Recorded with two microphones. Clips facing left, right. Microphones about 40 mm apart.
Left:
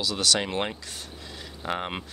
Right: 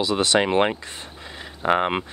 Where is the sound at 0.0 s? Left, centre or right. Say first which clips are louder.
Right 6 dB; right.